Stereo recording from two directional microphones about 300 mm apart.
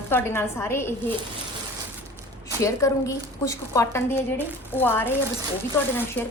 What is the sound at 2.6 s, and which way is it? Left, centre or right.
A woman's voice, centre.